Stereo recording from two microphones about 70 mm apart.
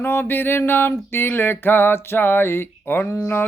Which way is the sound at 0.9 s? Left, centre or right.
Left.